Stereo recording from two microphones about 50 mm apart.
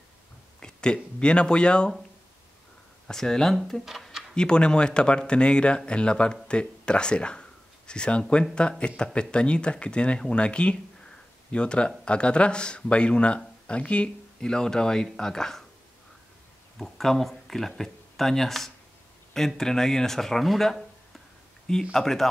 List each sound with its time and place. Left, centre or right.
0.6 s speech: centre
3.1 s speech: centre
16.7 s speech: centre